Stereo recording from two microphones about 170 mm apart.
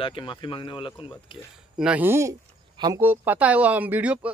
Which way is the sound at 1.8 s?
10° right (ahead or behind).